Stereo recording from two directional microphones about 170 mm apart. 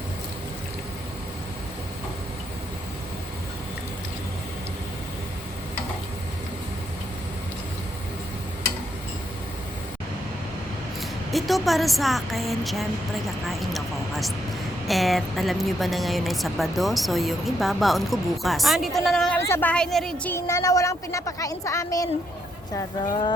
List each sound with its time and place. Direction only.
11.3 s a woman's voice: centre (ahead or behind)
13.5 s vehicle: centre (ahead or behind)
14.8 s a woman's voice: centre (ahead or behind)
20.3 s speech: 20° left (ahead or behind)